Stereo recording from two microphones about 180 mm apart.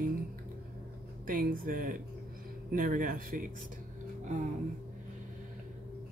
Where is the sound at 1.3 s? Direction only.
50° right (ahead or behind).